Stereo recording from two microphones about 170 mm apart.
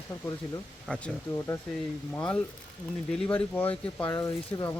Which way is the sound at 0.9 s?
5° left (ahead or behind).